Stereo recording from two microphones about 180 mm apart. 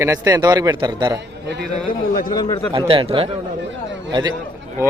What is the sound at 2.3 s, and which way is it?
Speech, 20° left (ahead or behind).